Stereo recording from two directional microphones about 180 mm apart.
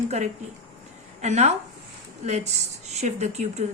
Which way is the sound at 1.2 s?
40° right (ahead or behind).